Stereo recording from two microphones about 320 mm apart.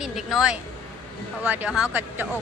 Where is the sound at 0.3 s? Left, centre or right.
Centre.